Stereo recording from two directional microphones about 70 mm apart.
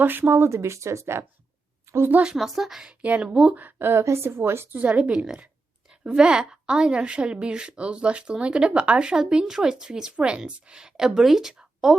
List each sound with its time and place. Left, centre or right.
0.0 s speech: right
2.0 s speech: right
2.3 s a woman's voice: centre
3.0 s a woman's voice: right
3.6 s speech: right
4.8 s a woman's voice: centre